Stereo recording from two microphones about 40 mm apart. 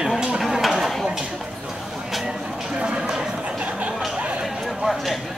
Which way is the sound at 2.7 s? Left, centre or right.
Centre.